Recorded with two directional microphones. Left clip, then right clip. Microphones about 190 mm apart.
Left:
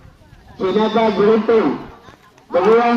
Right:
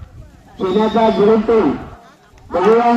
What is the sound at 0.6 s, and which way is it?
A man's voice, 55° right (ahead or behind).